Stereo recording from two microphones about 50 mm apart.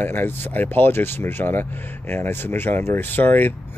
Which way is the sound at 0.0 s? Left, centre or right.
Left.